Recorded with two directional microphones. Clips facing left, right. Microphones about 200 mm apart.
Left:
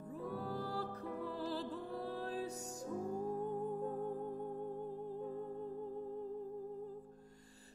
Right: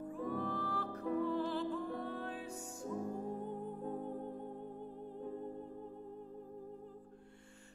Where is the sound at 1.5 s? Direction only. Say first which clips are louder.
Right 4 dB; 35° left (ahead or behind).